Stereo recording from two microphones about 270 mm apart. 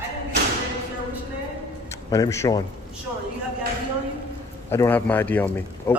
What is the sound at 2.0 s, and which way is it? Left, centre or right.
Speech, centre.